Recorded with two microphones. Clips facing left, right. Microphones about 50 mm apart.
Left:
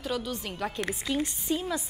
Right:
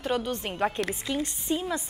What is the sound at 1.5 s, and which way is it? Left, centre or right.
Speech, centre.